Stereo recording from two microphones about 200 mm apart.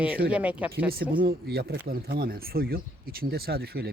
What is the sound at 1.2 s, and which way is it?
Speech, 50° right (ahead or behind).